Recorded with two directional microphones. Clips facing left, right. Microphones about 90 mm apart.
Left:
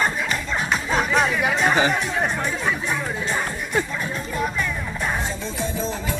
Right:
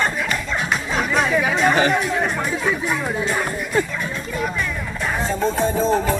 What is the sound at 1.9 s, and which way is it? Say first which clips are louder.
Speech: right 3 dB; 5° right (ahead or behind).